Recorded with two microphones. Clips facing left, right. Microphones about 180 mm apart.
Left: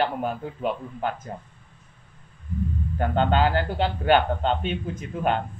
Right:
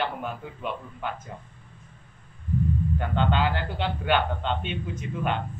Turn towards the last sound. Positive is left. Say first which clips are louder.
# left 4 dB
turn(degrees=45)  # may be behind; listen again after turning